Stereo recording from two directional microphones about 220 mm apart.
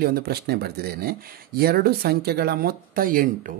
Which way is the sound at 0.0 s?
45° right (ahead or behind).